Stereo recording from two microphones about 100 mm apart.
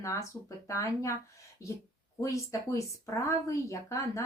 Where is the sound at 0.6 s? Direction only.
30° left (ahead or behind).